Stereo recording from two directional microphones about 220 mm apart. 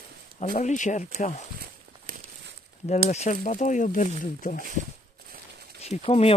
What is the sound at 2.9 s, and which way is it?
Speech, 30° left (ahead or behind).